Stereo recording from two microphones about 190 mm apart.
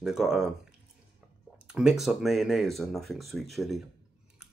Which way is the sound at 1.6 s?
5° right (ahead or behind).